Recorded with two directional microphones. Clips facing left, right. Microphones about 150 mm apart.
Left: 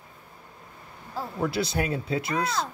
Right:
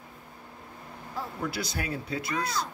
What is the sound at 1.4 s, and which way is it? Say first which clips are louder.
Speech: left 8 dB; 25° left (ahead or behind).